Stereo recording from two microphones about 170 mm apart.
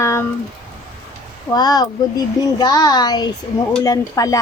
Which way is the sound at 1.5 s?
25° left (ahead or behind).